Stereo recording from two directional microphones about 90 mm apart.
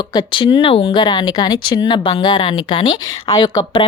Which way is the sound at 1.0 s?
50° left (ahead or behind).